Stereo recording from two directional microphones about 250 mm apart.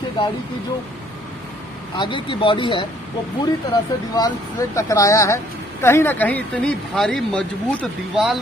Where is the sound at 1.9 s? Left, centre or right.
Centre.